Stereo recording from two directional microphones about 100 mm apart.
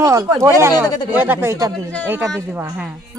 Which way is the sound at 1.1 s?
20° right (ahead or behind).